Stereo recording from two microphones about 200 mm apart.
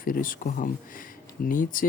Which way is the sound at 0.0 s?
45° left (ahead or behind).